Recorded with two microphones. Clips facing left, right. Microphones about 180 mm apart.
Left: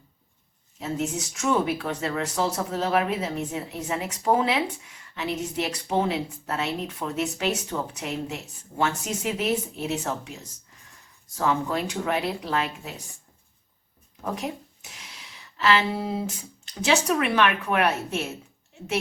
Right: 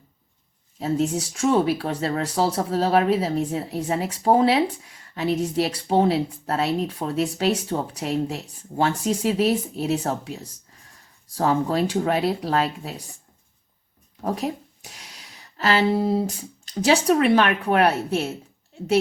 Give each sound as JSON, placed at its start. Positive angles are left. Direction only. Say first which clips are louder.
{"t": 0.8, "sound": "speech", "louder": "right 6 dB", "side_deg": -35}
{"t": 14.2, "sound": "speech", "louder": "right 5 dB", "side_deg": -35}